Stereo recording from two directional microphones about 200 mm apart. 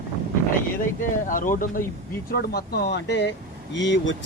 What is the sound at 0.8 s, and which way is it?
Speech, 40° left (ahead or behind).